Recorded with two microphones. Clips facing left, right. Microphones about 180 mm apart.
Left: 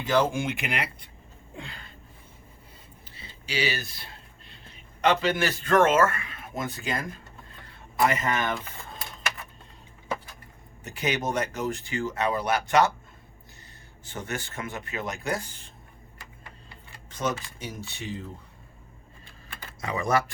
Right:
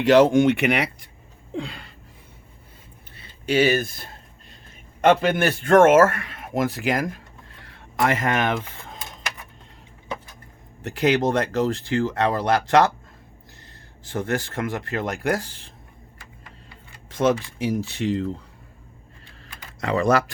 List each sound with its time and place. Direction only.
0.0 s a man's voice: 75° right (ahead or behind)
1.5 s speech: 90° right
3.2 s a man's voice: 55° right (ahead or behind); by 9.0 s 90° right
11.2 s speech: 90° right
14.2 s speech: 90° right
17.2 s speech: 90° right
19.8 s a man's voice: 70° right (ahead or behind)